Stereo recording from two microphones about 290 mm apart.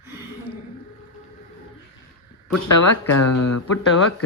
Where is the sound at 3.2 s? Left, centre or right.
Left.